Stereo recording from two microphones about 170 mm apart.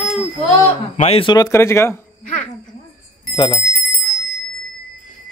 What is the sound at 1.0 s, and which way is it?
Speech, 35° left (ahead or behind).